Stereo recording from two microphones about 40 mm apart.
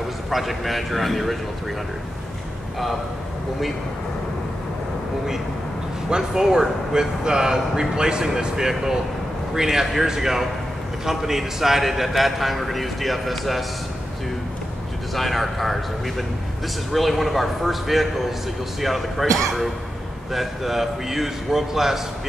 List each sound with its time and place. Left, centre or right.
0.3 s a man's voice: centre
6.0 s a man's voice: centre
15.1 s a man's voice: centre